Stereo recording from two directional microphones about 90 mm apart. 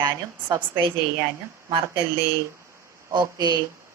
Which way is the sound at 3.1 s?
50° right (ahead or behind).